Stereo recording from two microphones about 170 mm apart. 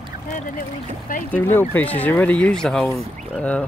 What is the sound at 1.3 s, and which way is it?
Speech, 15° left (ahead or behind).